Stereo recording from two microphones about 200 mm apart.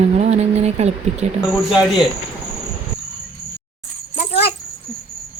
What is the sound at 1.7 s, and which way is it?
Speech, 5° right (ahead or behind).